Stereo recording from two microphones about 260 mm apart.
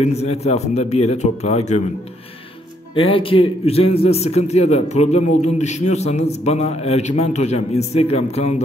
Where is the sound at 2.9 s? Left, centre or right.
Centre.